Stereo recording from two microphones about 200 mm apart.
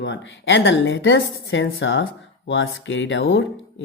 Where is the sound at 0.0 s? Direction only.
65° left (ahead or behind).